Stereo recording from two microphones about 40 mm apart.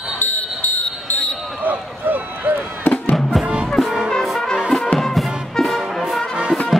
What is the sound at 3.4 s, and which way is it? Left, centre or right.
Music, right.